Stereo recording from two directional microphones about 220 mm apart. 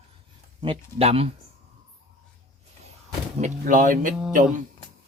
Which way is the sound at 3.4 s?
35° right (ahead or behind).